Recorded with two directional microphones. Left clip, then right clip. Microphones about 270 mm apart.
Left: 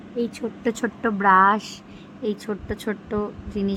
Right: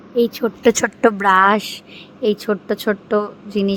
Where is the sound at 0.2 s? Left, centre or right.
Centre.